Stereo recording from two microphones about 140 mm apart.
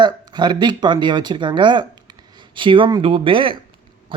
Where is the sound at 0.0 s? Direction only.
30° right (ahead or behind).